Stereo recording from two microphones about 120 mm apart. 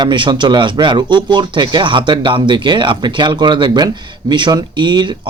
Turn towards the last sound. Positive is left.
turn(degrees=-40)  # may be behind; listen again after turning